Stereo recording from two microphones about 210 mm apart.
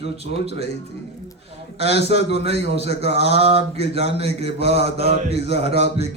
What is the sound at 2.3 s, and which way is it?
A man's voice, 30° right (ahead or behind).